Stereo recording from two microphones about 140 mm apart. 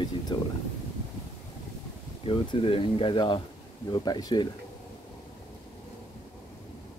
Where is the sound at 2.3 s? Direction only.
40° left (ahead or behind).